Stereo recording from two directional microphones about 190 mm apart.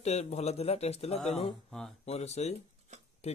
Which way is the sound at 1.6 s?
Centre (ahead or behind).